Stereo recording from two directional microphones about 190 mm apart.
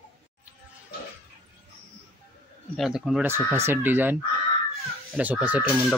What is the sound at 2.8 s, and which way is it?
Speech, centre (ahead or behind).